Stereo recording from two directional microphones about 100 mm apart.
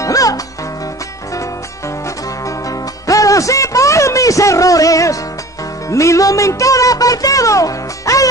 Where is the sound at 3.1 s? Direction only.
35° left (ahead or behind).